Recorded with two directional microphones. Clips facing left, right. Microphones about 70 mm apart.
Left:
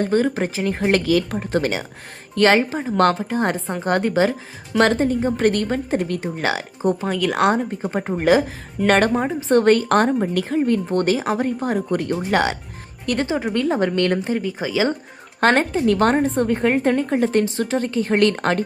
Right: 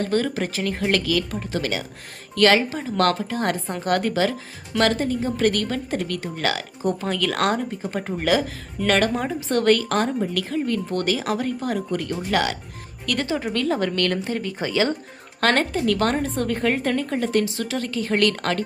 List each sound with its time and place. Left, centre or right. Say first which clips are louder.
0.0 s a woman's voice: left 4 dB; centre
8.9 s a woman's voice: left 4 dB; left
9.1 s speech: left 6 dB; left
9.9 s a woman's voice: left 5 dB; left
14.3 s speech: left 2 dB; centre
15.4 s speech: left 4 dB; left